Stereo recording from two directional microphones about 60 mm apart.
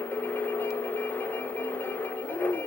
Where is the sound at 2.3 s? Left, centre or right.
Left.